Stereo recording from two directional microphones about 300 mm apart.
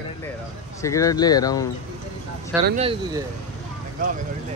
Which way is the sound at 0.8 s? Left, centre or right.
Centre.